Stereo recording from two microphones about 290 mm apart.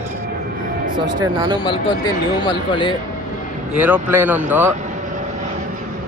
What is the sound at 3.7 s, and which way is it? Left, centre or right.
Speech, centre.